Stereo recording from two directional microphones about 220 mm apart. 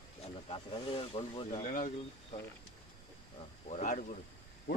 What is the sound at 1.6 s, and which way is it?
Speech, 35° left (ahead or behind).